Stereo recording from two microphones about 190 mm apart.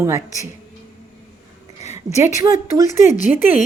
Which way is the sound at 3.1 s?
45° left (ahead or behind).